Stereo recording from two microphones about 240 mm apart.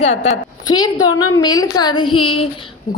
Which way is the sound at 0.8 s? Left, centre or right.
Left.